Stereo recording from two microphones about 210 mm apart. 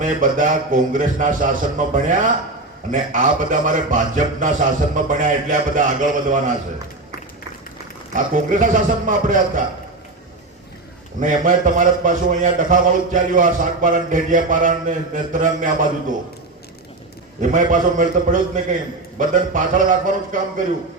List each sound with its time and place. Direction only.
0.0 s a man's voice: 40° right (ahead or behind)
8.1 s a man's voice: 40° right (ahead or behind)
11.2 s a man's voice: 40° right (ahead or behind)
17.4 s a man's voice: 40° right (ahead or behind)